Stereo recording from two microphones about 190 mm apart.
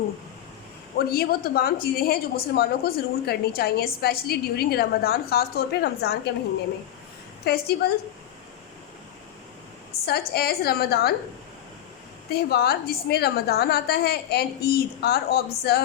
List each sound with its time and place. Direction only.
0.9 s a woman's voice: 55° left (ahead or behind)
7.4 s a woman's voice: 60° left (ahead or behind)
10.1 s a woman's voice: 55° left (ahead or behind)
12.3 s a woman's voice: 55° left (ahead or behind)